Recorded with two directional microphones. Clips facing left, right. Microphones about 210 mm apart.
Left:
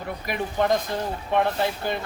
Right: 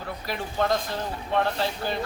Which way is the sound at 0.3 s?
20° left (ahead or behind).